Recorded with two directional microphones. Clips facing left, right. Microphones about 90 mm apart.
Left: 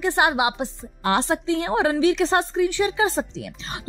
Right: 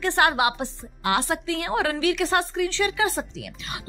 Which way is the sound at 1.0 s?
30° left (ahead or behind).